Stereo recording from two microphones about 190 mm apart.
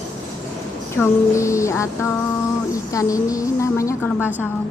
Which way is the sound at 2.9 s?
15° left (ahead or behind).